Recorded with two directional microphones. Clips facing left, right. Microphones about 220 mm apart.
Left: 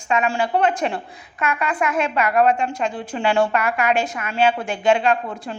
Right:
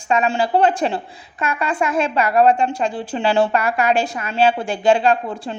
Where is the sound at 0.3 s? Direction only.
35° right (ahead or behind).